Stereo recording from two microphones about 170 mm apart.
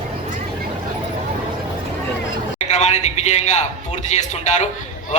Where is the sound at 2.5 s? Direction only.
40° left (ahead or behind).